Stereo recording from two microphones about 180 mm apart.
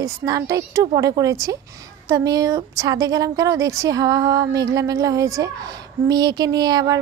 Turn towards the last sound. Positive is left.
turn(degrees=-20)  # may be behind; listen again after turning